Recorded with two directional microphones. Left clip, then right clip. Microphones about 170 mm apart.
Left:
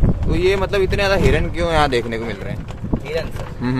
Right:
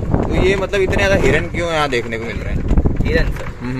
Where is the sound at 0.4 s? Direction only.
Centre (ahead or behind).